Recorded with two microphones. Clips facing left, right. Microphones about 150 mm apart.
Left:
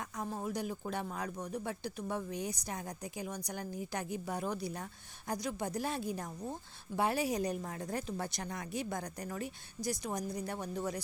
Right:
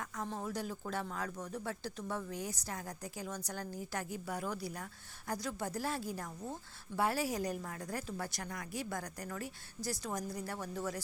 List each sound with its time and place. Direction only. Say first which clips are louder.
0.3 s a woman's voice: left 3 dB; 10° left (ahead or behind)